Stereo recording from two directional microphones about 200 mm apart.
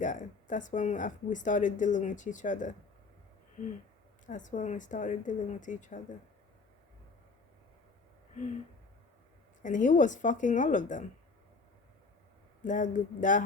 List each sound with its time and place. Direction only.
0.0 s speech: 40° left (ahead or behind)
4.3 s speech: 40° left (ahead or behind)
9.6 s speech: 40° left (ahead or behind)
12.6 s speech: 40° left (ahead or behind)